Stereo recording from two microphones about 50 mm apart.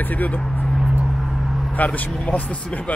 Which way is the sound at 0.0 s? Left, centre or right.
Left.